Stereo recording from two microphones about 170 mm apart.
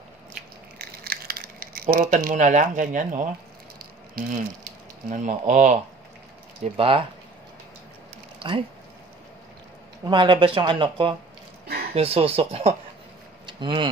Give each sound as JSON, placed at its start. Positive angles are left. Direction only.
{"t": 0.7, "sound": "a sound", "side_deg": -65}
{"t": 4.6, "sound": "speech", "side_deg": -45}
{"t": 6.6, "sound": "speech", "side_deg": -30}
{"t": 8.4, "sound": "speech", "side_deg": -30}
{"t": 10.0, "sound": "speech", "side_deg": -30}